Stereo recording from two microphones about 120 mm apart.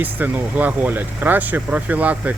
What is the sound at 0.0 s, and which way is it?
Speech, 15° right (ahead or behind).